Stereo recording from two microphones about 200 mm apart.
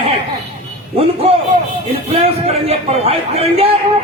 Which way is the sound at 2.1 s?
30° right (ahead or behind).